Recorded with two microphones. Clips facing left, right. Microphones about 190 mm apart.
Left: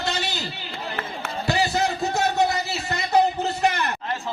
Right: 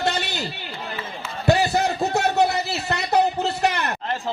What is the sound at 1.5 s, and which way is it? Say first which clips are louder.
Music: right 4 dB; 60° right (ahead or behind).